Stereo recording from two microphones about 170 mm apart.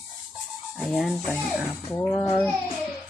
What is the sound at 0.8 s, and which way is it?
Speech, centre (ahead or behind).